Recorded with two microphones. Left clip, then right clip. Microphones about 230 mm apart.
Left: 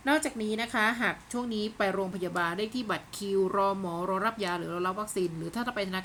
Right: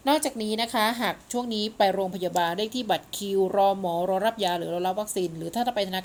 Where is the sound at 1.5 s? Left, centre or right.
Centre.